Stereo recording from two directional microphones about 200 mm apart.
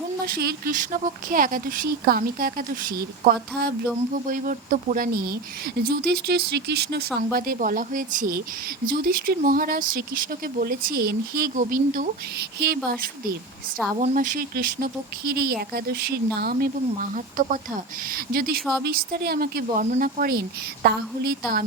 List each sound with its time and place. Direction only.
0.3 s a woman's voice: 50° right (ahead or behind)
4.1 s a woman's voice: 45° right (ahead or behind)
13.9 s a woman's voice: 35° right (ahead or behind)